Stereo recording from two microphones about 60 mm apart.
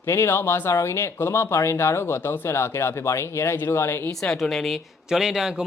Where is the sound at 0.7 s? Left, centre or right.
Left.